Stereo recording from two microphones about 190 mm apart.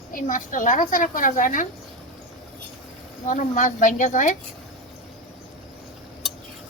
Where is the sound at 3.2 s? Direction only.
45° left (ahead or behind).